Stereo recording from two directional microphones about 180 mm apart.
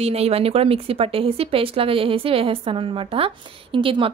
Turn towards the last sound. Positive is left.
turn(degrees=-30)  # may be behind; listen again after turning